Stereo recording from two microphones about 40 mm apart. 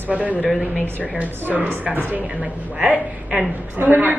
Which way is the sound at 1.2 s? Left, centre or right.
Right.